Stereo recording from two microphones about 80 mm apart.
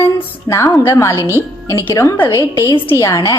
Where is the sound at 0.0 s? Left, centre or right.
Left.